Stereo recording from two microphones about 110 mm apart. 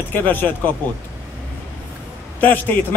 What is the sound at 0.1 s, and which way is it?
Speech, 20° left (ahead or behind).